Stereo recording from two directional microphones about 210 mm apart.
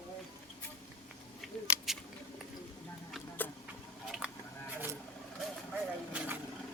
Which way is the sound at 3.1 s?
10° left (ahead or behind).